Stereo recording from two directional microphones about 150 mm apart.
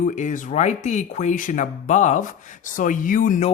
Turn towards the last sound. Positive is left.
turn(degrees=60)  # may be behind; listen again after turning